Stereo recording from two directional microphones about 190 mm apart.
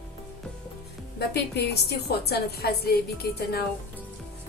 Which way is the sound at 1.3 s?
60° left (ahead or behind).